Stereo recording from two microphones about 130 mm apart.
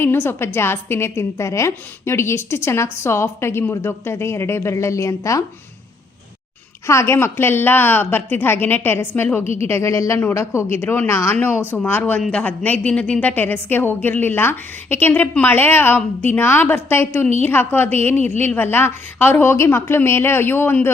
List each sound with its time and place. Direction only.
0.0 s a woman's voice: 20° left (ahead or behind)
6.8 s a woman's voice: 20° left (ahead or behind)